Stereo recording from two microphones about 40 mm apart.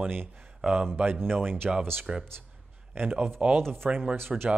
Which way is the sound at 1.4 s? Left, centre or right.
Right.